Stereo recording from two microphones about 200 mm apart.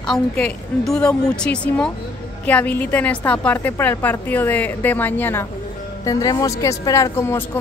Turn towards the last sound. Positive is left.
turn(degrees=15)  # may be behind; listen again after turning